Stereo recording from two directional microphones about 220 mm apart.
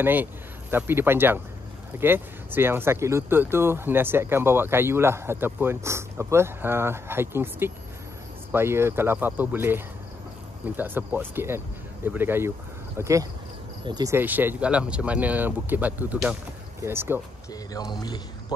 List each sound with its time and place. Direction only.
0.0 s speech: 10° right (ahead or behind)
17.5 s speech: 15° left (ahead or behind)